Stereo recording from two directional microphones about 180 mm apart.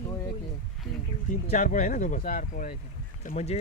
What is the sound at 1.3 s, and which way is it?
Speech, 45° left (ahead or behind).